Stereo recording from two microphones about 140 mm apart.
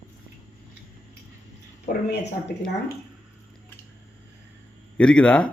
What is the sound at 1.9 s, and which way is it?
Speech, 65° left (ahead or behind).